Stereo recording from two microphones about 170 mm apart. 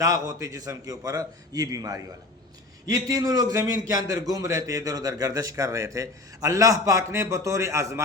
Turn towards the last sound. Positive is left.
turn(degrees=-15)  # may be behind; listen again after turning